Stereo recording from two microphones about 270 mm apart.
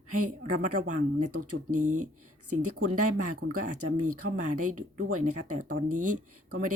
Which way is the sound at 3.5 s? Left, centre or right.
Right.